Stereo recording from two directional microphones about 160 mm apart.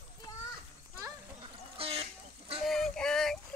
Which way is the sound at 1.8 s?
35° right (ahead or behind).